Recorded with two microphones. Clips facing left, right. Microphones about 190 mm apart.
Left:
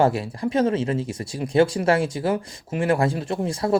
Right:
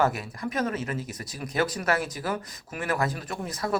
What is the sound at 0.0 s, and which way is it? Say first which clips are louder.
Speech: left 6 dB; 30° left (ahead or behind).